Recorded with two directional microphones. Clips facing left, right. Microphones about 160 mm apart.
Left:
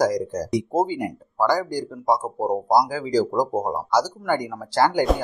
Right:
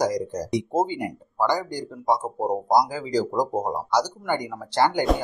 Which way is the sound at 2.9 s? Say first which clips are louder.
Left 3 dB; 15° right (ahead or behind).